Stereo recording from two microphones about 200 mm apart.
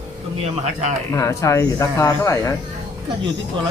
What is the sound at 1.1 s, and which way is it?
Speech, 15° left (ahead or behind).